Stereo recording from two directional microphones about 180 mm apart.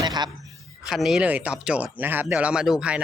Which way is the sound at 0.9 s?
Centre (ahead or behind).